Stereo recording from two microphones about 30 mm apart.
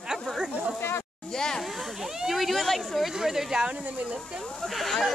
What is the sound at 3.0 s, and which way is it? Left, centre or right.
Speech, centre.